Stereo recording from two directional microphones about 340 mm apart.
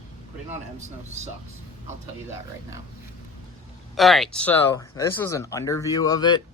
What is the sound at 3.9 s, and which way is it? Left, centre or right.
Speech, centre.